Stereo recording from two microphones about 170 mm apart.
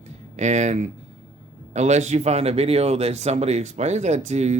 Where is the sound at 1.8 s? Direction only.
40° right (ahead or behind).